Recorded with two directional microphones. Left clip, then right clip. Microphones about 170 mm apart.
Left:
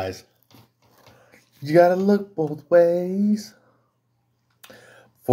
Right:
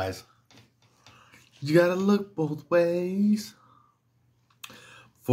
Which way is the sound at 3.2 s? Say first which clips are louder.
Left 3 dB; 40° right (ahead or behind).